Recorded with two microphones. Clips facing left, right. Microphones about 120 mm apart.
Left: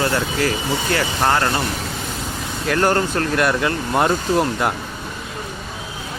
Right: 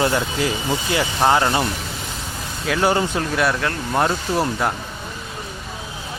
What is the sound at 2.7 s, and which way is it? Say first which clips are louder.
Speech: left 1 dB; 10° right (ahead or behind).